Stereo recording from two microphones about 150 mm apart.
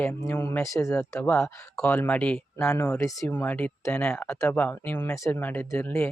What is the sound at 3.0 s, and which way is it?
Speech, 20° left (ahead or behind).